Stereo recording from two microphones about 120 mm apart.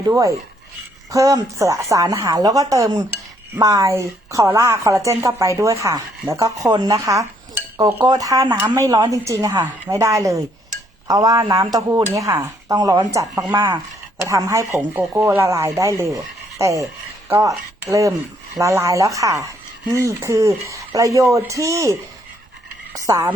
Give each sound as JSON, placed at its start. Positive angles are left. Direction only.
{"t": 1.1, "sound": "speech", "side_deg": -25}
{"t": 8.0, "sound": "speech", "side_deg": -30}
{"t": 14.7, "sound": "speech", "side_deg": -15}